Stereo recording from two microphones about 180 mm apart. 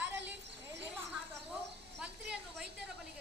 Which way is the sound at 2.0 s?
5° right (ahead or behind).